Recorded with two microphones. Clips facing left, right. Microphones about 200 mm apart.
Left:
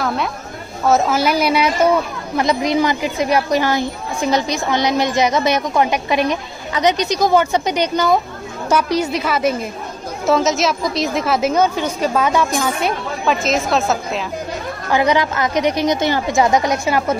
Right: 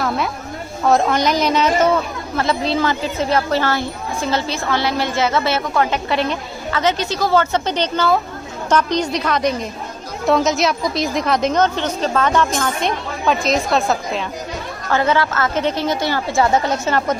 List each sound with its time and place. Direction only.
0.8 s a woman's voice: 5° left (ahead or behind)
14.9 s a woman's voice: 15° left (ahead or behind)